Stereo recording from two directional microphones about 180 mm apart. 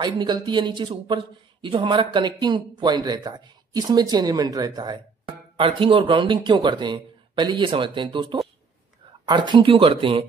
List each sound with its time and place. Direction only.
0.0 s speech: 25° right (ahead or behind)